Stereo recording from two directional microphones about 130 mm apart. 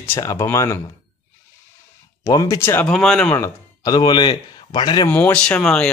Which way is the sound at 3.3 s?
20° left (ahead or behind).